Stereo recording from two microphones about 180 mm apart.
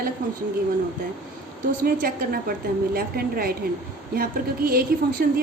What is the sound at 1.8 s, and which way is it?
A woman's voice, 55° right (ahead or behind).